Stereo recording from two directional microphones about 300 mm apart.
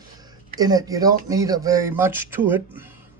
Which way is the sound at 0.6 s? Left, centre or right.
Centre.